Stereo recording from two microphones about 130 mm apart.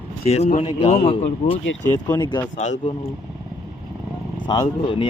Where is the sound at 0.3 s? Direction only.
55° left (ahead or behind).